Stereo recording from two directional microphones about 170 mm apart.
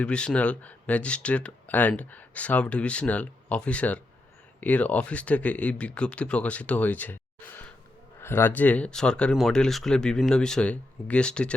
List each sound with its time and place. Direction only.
0.0 s speech: 5° left (ahead or behind)